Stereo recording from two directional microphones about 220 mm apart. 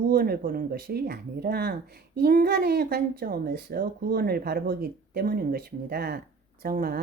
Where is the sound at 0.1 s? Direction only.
40° right (ahead or behind).